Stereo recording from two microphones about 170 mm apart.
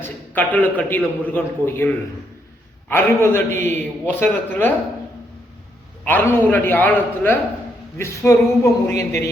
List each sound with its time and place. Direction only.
0.0 s a man's voice: 10° left (ahead or behind)
2.9 s a man's voice: 15° left (ahead or behind)
6.1 s a man's voice: 10° left (ahead or behind)